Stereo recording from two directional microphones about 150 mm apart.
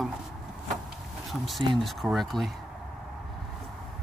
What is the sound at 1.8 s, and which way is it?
Speech, centre (ahead or behind).